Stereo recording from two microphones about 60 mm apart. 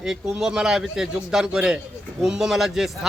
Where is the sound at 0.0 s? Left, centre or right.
Centre.